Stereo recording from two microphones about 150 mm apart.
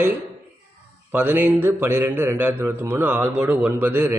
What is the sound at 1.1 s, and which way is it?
Mantra, 10° right (ahead or behind).